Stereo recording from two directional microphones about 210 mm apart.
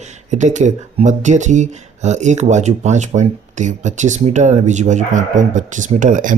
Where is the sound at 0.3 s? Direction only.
35° right (ahead or behind).